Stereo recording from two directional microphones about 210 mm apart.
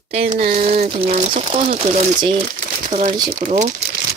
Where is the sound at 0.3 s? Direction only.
40° right (ahead or behind).